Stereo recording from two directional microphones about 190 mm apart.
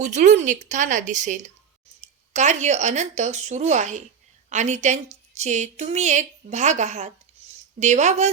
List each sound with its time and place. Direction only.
0.0 s a woman's voice: 40° right (ahead or behind)